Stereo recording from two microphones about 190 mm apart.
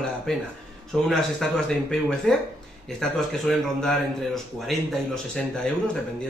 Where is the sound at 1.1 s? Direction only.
5° left (ahead or behind).